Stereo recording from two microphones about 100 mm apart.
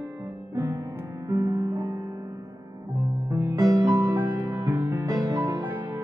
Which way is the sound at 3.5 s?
40° right (ahead or behind).